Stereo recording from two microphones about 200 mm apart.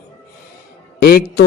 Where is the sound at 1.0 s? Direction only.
50° left (ahead or behind).